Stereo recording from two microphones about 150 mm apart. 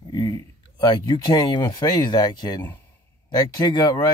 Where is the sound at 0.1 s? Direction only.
25° left (ahead or behind).